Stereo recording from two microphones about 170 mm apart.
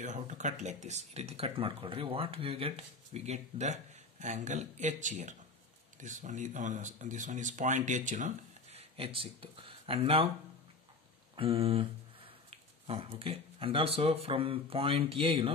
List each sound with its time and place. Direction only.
0.0 s speech: 45° right (ahead or behind)
8.7 s speech: 35° right (ahead or behind)
11.3 s a sound: 35° right (ahead or behind)
12.4 s speech: 35° right (ahead or behind)